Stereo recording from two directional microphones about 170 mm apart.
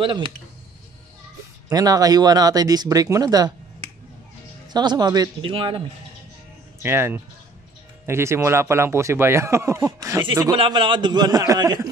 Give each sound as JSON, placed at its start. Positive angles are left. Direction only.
{"t": 0.0, "sound": "speech", "side_deg": -30}
{"t": 1.7, "sound": "speech", "side_deg": -20}
{"t": 4.7, "sound": "speech", "side_deg": -25}
{"t": 6.8, "sound": "speech", "side_deg": -15}